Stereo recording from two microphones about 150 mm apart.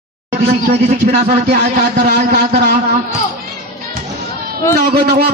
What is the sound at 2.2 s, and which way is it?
Speech, 60° right (ahead or behind).